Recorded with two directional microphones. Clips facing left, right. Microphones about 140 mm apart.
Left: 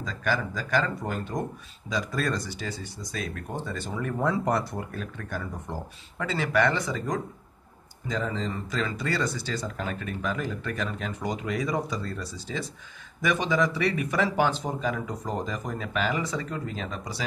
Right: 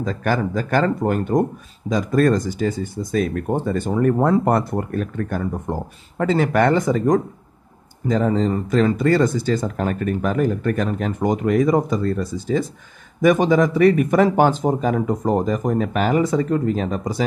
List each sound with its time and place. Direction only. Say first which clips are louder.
0.0 s speech: right 8 dB; 50° right (ahead or behind)